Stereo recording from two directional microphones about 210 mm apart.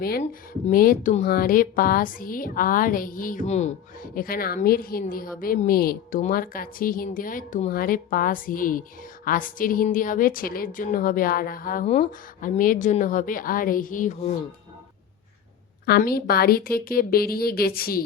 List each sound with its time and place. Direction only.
0.0 s a woman's voice: 45° left (ahead or behind)
15.9 s a woman's voice: 45° left (ahead or behind)